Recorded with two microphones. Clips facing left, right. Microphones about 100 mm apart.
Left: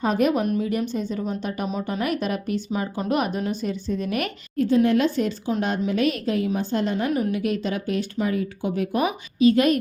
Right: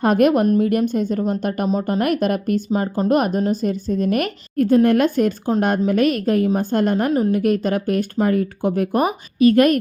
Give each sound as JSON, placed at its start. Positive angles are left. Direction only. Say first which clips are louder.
{"t": 0.0, "sound": "a woman's voice", "louder": "right 6 dB", "side_deg": -60}